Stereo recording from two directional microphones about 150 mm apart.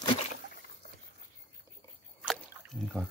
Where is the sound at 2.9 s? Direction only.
5° left (ahead or behind).